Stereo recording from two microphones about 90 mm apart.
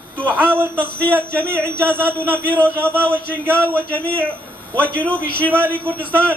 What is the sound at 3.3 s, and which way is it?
A man's voice, 15° left (ahead or behind).